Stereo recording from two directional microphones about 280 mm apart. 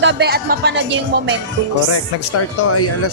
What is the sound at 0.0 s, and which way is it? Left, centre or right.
Speech, right.